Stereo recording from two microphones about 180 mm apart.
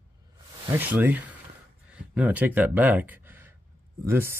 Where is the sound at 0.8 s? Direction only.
10° right (ahead or behind).